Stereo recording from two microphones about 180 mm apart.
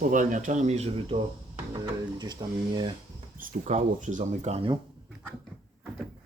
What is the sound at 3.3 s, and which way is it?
Speech, 50° right (ahead or behind).